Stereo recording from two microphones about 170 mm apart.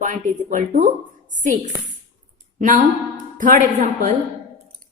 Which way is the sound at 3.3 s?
55° right (ahead or behind).